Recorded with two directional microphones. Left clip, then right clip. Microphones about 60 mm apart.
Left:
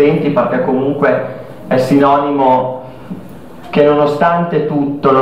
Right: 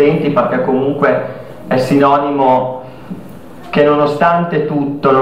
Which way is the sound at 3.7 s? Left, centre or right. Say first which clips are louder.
Left 1 dB; right.